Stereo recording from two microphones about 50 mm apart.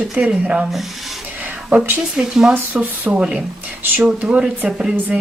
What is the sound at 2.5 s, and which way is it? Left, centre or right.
Speech, right.